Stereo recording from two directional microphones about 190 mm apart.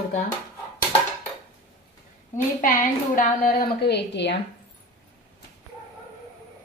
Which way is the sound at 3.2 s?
50° left (ahead or behind).